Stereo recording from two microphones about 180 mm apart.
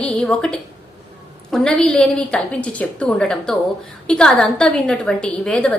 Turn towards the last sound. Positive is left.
turn(degrees=5)  # may be behind; listen again after turning